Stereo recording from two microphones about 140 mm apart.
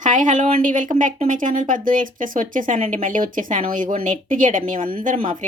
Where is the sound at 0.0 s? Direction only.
60° right (ahead or behind).